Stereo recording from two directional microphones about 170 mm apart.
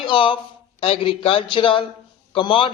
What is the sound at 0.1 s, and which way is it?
A man's voice, 30° left (ahead or behind).